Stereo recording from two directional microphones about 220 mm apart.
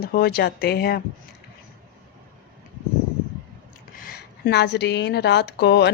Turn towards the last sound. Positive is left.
turn(degrees=50)  # may be behind; listen again after turning